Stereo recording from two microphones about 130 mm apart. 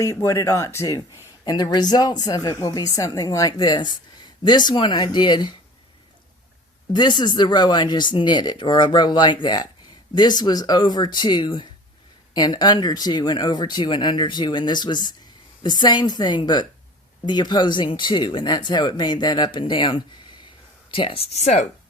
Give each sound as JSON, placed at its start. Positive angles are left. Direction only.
{"t": 0.0, "sound": "speech", "side_deg": 20}
{"t": 6.9, "sound": "speech", "side_deg": 35}